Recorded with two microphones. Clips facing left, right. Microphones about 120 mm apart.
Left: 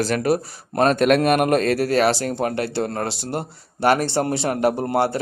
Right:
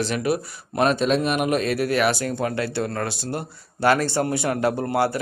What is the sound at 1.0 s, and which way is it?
A man's voice, 60° left (ahead or behind).